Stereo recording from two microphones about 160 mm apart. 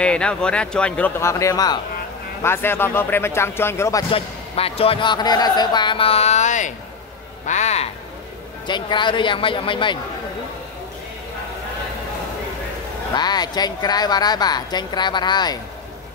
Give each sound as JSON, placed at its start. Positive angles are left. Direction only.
{"t": 0.0, "sound": "speech", "side_deg": 5}
{"t": 4.1, "sound": "speech", "side_deg": 35}
{"t": 8.6, "sound": "speech", "side_deg": 30}
{"t": 13.1, "sound": "speech", "side_deg": 25}